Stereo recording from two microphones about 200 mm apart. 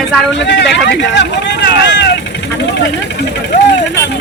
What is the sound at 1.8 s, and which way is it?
Vehicle, 65° left (ahead or behind).